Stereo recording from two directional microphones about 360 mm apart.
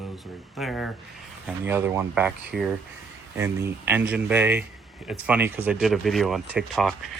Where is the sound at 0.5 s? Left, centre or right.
Centre.